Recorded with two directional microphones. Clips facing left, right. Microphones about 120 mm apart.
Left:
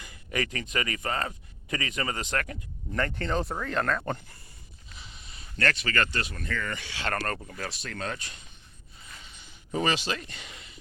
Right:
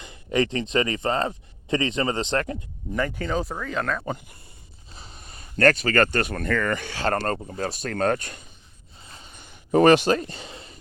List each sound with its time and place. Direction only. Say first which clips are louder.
0.0 s a man's voice: right 8 dB; 25° right (ahead or behind)
2.9 s speech: right 3 dB; 5° right (ahead or behind)
4.9 s speech: right 4 dB; 40° right (ahead or behind)
7.1 s speech: right 6 dB; 30° right (ahead or behind)
7.8 s speech: right 15 dB; 45° right (ahead or behind)
9.0 s a sound: right 3 dB; 30° right (ahead or behind)
9.3 s a sound: right 12 dB; 55° right (ahead or behind)
10.2 s speech: right 9 dB; 35° right (ahead or behind)